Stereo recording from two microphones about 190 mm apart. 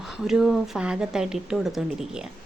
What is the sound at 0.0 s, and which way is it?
A woman's voice, centre (ahead or behind).